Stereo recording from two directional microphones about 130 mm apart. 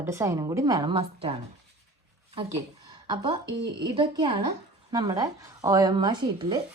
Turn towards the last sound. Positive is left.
turn(degrees=-35)  # may be behind; listen again after turning